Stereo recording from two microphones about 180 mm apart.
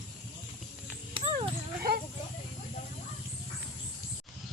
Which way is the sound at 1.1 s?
30° right (ahead or behind).